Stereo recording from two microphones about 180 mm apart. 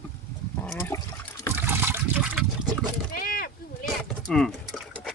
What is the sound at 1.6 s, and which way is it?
Liquid, 15° right (ahead or behind).